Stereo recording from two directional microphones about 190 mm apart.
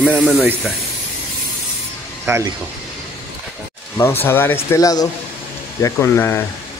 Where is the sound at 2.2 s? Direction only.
15° right (ahead or behind).